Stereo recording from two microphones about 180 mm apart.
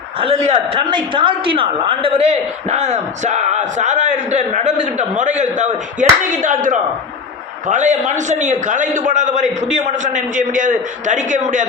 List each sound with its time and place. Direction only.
0.2 s a man's voice: 30° right (ahead or behind)